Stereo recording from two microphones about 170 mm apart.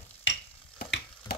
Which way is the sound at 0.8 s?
65° left (ahead or behind).